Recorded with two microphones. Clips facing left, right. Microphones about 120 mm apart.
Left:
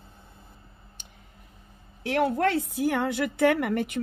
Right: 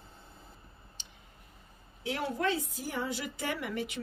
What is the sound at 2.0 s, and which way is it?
A woman's voice, 60° left (ahead or behind).